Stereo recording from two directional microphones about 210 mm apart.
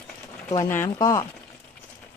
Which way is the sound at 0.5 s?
10° left (ahead or behind).